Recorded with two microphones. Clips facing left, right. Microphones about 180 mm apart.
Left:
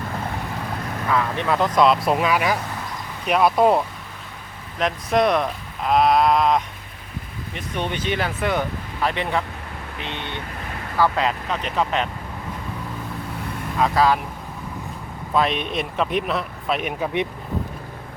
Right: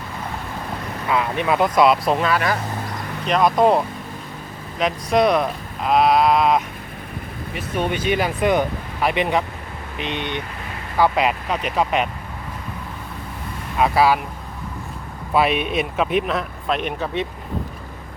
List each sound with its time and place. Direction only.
1.1 s speech: 10° right (ahead or behind)
2.0 s speech: 10° left (ahead or behind)
4.8 s speech: centre (ahead or behind)
13.7 s speech: 10° right (ahead or behind)
15.3 s speech: 10° right (ahead or behind)